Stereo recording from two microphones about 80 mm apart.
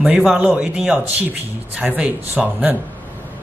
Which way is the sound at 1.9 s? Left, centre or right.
Right.